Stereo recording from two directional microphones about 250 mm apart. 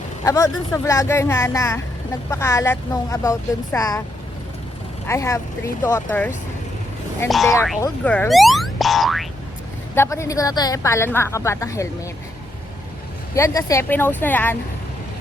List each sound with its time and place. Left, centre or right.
0.3 s a woman's voice: centre
5.0 s a woman's voice: centre
9.9 s a woman's voice: centre
13.3 s a woman's voice: centre